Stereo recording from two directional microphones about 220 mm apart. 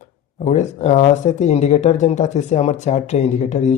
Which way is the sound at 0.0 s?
35° left (ahead or behind).